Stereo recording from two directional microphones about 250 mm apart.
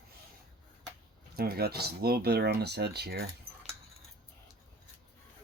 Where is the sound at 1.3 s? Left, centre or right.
Right.